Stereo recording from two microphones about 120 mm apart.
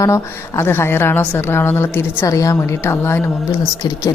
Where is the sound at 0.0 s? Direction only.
25° left (ahead or behind).